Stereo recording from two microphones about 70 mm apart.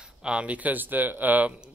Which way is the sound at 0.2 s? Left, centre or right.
Centre.